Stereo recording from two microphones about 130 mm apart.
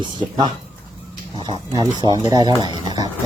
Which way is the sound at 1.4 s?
35° right (ahead or behind).